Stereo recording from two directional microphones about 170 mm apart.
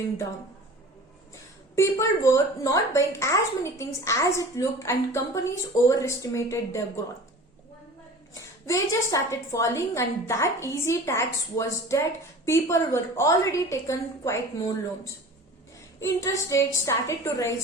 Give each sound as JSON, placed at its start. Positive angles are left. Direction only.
{"t": 1.7, "sound": "a woman's voice", "side_deg": 15}
{"t": 8.3, "sound": "a woman's voice", "side_deg": 20}
{"t": 16.0, "sound": "a woman's voice", "side_deg": 20}